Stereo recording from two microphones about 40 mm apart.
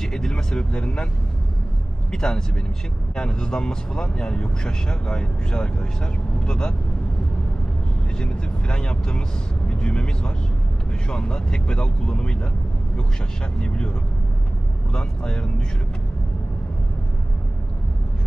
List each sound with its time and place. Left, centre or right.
0.0 s speech: centre
2.1 s speech: centre
8.2 s speech: left
13.6 s speech: left
14.9 s speech: left